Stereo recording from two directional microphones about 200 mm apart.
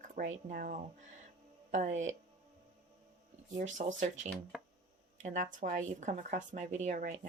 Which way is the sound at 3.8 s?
40° right (ahead or behind).